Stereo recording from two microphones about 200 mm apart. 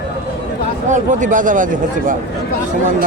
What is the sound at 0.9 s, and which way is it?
Speech, 40° right (ahead or behind).